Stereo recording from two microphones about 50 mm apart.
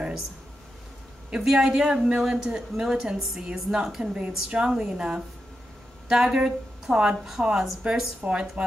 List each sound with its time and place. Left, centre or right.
1.4 s a woman's voice: centre